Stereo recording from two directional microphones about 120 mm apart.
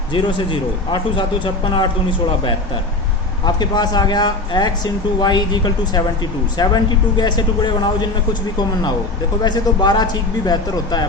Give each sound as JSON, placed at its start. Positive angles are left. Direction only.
{"t": 0.1, "sound": "a man's voice", "side_deg": 45}